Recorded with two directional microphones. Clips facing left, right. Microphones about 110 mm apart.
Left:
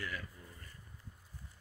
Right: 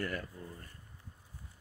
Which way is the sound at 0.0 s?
45° right (ahead or behind).